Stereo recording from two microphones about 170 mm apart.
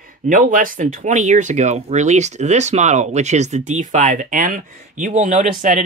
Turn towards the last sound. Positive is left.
turn(degrees=-45)  # may be behind; listen again after turning